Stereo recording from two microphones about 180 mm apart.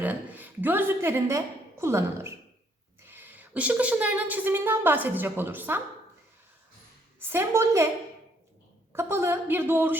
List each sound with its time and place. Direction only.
0.0 s a woman's voice: 10° right (ahead or behind)
7.2 s a woman's voice: 10° right (ahead or behind)
8.9 s a woman's voice: 15° right (ahead or behind)